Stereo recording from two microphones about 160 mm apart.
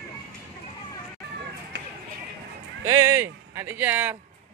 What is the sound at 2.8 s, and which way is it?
Speech, 15° right (ahead or behind).